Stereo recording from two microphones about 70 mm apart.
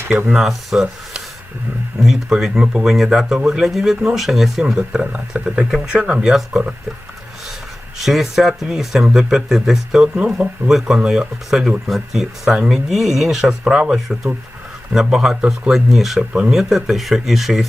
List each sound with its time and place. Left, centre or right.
0.3 s speech: centre
2.0 s speech: centre
7.9 s speech: centre
10.2 s speech: centre
10.7 s speech: centre